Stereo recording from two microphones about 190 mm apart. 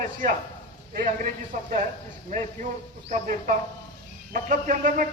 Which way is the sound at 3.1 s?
45° right (ahead or behind).